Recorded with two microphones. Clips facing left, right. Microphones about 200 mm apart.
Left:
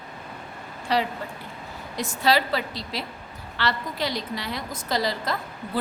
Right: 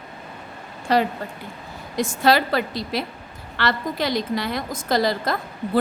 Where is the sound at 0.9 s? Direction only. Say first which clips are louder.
Right 5 dB; 50° right (ahead or behind).